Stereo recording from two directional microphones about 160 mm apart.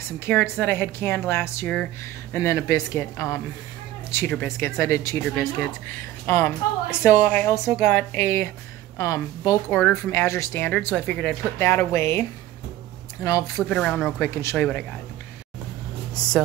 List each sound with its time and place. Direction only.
0.2 s a woman's voice: 10° left (ahead or behind)
6.2 s a woman's voice: 15° left (ahead or behind)
11.6 s a woman's voice: 15° left (ahead or behind)
13.7 s a woman's voice: 5° left (ahead or behind)
16.2 s speech: 5° left (ahead or behind)